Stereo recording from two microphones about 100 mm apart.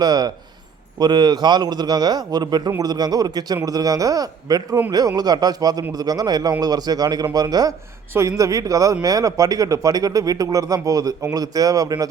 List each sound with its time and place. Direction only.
0.0 s a man's voice: 40° right (ahead or behind)